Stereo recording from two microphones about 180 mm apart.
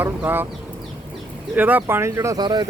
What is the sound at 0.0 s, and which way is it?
Speech, 10° right (ahead or behind).